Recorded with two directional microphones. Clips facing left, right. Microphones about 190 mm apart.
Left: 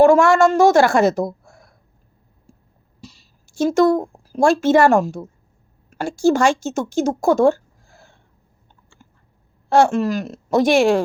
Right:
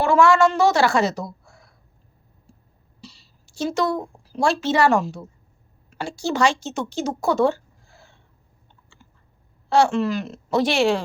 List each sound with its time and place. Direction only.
0.0 s a woman's voice: 50° left (ahead or behind)
3.0 s a woman's voice: 45° left (ahead or behind)
9.6 s a woman's voice: 50° left (ahead or behind)